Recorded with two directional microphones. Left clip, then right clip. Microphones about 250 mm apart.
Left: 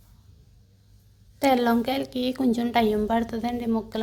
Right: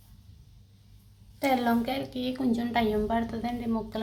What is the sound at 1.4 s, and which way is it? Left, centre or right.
A woman's voice, left.